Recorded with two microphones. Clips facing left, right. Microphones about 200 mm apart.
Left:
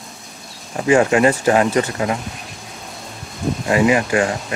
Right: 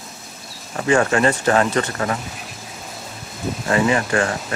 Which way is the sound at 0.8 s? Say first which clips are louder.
Left 3 dB; 20° left (ahead or behind).